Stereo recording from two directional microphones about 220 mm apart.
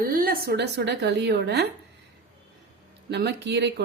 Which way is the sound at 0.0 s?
40° right (ahead or behind).